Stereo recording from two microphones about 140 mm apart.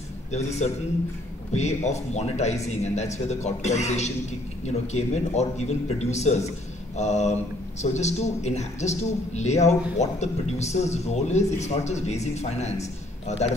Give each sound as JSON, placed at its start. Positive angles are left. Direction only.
{"t": 0.3, "sound": "speech", "side_deg": 55}